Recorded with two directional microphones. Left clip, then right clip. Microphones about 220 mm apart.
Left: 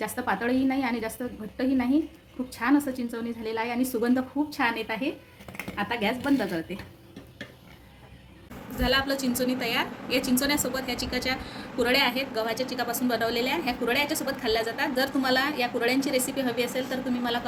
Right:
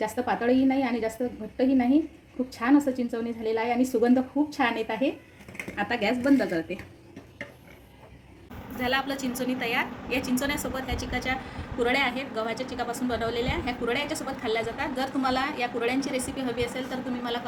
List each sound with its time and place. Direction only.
0.0 s a woman's voice: centre (ahead or behind)
8.8 s a woman's voice: 15° left (ahead or behind)